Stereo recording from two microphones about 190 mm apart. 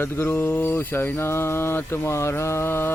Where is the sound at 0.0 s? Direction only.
10° left (ahead or behind).